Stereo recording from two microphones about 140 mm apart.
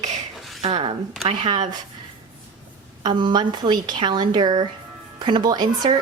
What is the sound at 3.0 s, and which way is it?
A woman's voice, 35° right (ahead or behind).